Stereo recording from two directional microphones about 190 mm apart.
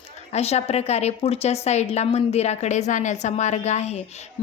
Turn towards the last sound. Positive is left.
turn(degrees=35)  # may be behind; listen again after turning